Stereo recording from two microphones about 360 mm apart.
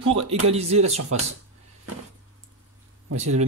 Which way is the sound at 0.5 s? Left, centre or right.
Centre.